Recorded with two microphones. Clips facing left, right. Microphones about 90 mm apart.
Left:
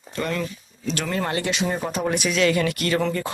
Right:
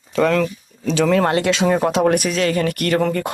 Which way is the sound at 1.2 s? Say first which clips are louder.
Right 8 dB; 70° right (ahead or behind).